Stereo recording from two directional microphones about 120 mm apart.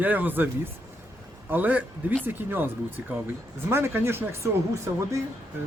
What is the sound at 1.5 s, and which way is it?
Speech, 15° right (ahead or behind).